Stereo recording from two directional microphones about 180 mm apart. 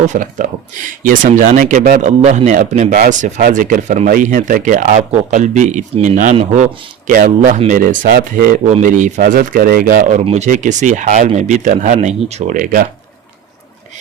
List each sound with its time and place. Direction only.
0.0 s speech: 45° right (ahead or behind)
7.1 s speech: 50° right (ahead or behind)